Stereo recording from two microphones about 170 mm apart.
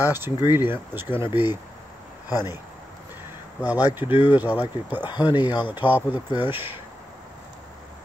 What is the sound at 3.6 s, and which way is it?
Speech, 10° right (ahead or behind).